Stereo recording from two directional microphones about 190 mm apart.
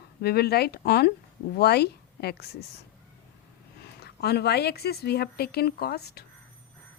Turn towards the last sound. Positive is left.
turn(degrees=55)  # may be behind; listen again after turning